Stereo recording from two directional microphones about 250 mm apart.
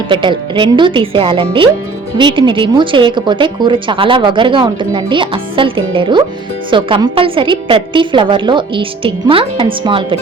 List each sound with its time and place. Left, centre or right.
0.1 s a woman's voice: centre